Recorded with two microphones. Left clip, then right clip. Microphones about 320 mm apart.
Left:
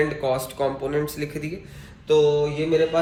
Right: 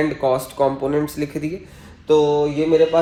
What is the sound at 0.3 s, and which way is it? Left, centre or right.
Speech, centre.